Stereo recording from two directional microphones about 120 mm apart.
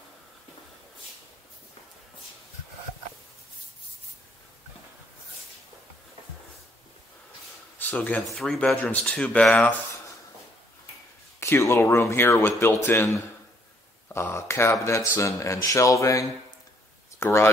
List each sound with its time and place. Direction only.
7.8 s speech: 10° left (ahead or behind)
11.3 s a man's voice: 20° left (ahead or behind)